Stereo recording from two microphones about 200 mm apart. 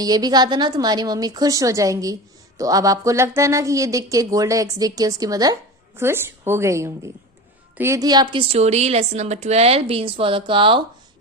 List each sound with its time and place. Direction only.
0.0 s a woman's voice: 20° right (ahead or behind)